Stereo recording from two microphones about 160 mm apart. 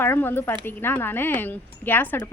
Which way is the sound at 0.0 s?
15° left (ahead or behind).